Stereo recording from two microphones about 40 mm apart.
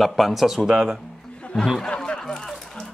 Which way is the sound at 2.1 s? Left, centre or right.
Centre.